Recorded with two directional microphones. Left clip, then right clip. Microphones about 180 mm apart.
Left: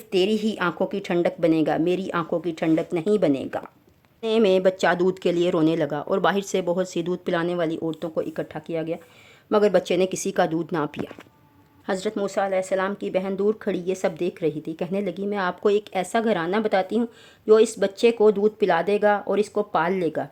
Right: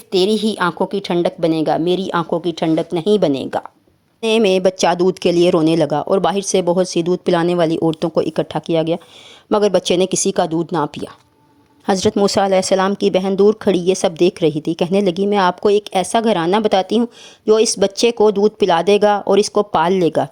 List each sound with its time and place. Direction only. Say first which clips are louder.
0.1 s a woman's voice: right 6 dB; 20° right (ahead or behind)
11.9 s speech: right 11 dB; 40° right (ahead or behind)